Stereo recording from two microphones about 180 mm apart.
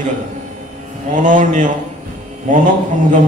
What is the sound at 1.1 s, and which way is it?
Speech, 45° right (ahead or behind).